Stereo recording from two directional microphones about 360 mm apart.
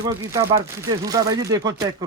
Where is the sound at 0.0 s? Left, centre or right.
Centre.